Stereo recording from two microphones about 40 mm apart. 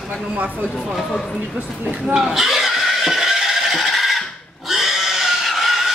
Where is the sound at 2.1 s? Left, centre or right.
Centre.